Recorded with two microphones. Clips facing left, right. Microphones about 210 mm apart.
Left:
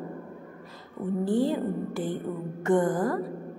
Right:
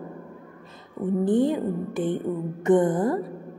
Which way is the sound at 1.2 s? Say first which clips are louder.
Right 3 dB; 20° right (ahead or behind).